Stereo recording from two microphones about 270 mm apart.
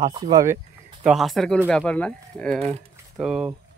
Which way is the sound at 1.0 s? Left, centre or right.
Centre.